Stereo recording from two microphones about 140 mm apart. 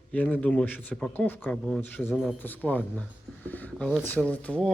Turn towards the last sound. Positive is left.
turn(degrees=10)  # may be behind; listen again after turning